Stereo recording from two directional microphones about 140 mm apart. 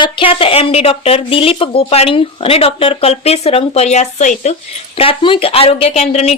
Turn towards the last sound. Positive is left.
turn(degrees=50)  # may be behind; listen again after turning